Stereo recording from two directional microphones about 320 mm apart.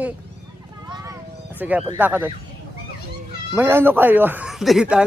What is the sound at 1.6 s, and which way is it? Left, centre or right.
Speech, centre.